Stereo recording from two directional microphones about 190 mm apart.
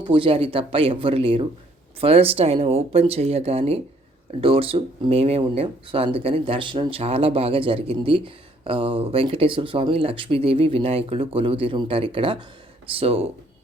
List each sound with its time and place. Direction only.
0.0 s speech: 25° right (ahead or behind)